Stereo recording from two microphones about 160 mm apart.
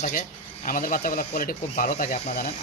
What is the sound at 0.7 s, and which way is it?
Speech, 60° left (ahead or behind).